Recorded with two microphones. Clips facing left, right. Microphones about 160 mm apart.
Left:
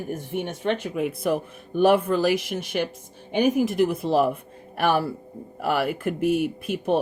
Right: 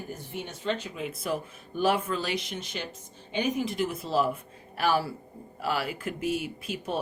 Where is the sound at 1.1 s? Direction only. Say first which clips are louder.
Left 7 dB; 60° left (ahead or behind).